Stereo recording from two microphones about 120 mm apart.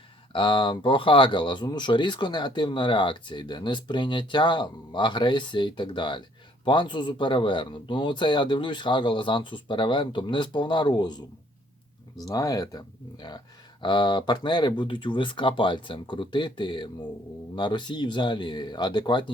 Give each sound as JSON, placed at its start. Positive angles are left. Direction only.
{"t": 0.3, "sound": "speech", "side_deg": 40}